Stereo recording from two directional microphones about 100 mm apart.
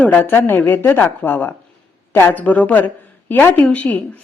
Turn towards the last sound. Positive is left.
turn(degrees=15)  # may be behind; listen again after turning